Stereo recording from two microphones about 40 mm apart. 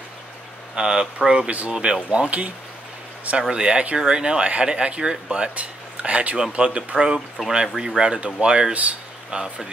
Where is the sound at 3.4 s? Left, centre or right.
Right.